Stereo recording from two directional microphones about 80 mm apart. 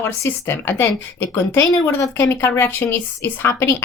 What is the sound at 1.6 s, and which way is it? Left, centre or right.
Speech, left.